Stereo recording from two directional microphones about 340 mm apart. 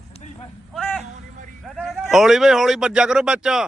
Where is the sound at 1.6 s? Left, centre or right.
Centre.